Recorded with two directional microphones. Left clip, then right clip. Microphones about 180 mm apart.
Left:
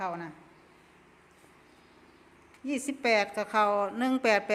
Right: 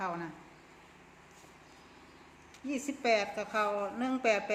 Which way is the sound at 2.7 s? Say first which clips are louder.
Left 3 dB; 45° left (ahead or behind).